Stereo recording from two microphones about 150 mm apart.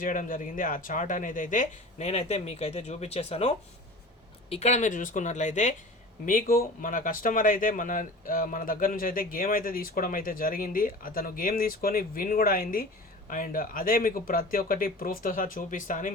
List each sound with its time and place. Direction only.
0.0 s speech: 65° left (ahead or behind)
6.2 s speech: 70° left (ahead or behind)